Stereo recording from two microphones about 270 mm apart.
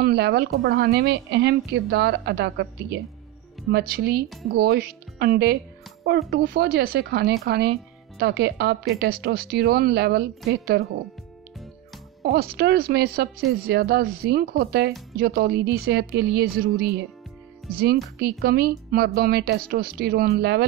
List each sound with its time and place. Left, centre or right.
0.0 s a woman's voice: right
12.2 s a woman's voice: right
18.4 s a woman's voice: right